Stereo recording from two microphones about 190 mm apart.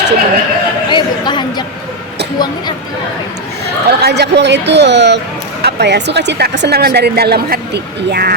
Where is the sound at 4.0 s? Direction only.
60° right (ahead or behind).